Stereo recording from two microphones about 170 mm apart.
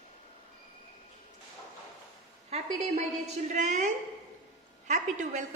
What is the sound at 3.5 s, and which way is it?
A woman's voice, 45° right (ahead or behind).